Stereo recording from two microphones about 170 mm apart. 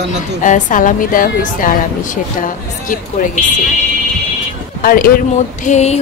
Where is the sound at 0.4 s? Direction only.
50° left (ahead or behind).